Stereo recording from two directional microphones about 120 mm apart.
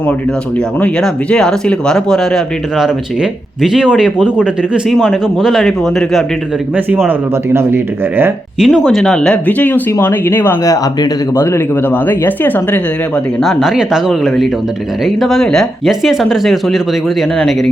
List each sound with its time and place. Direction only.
0.8 s speech: 5° left (ahead or behind)
7.1 s speech: 20° right (ahead or behind)
8.5 s speech: 5° right (ahead or behind); by 12.8 s 15° left (ahead or behind)
13.4 s speech: centre (ahead or behind)